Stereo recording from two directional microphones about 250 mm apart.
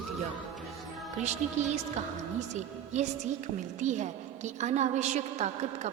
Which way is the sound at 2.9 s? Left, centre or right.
Right.